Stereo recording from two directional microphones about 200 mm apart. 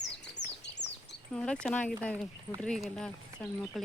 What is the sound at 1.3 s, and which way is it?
Speech, 5° left (ahead or behind).